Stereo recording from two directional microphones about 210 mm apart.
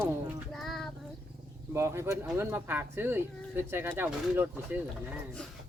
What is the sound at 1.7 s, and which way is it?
Speech, 15° right (ahead or behind).